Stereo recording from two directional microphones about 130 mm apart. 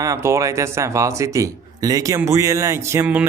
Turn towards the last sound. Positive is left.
turn(degrees=-20)  # may be behind; listen again after turning